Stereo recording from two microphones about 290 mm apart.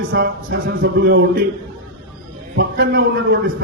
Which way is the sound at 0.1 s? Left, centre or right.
Right.